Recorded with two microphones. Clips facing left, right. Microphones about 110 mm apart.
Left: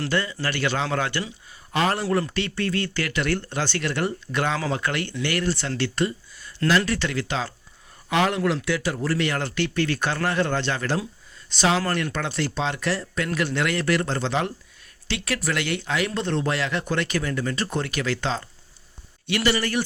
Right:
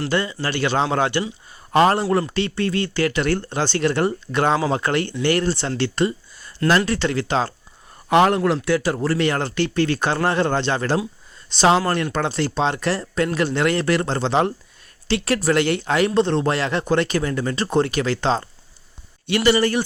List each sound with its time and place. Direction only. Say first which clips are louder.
0.1 s speech: right 3 dB; 25° right (ahead or behind)
1.7 s speech: right 7 dB; 45° right (ahead or behind)
2.1 s speech: right 4 dB; 25° right (ahead or behind)
8.1 s speech: right 7 dB; 50° right (ahead or behind)
8.4 s speech: right 4 dB; 35° right (ahead or behind)
16.1 s speech: right 6 dB; 30° right (ahead or behind)